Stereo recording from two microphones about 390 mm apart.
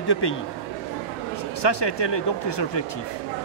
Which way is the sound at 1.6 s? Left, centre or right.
Left.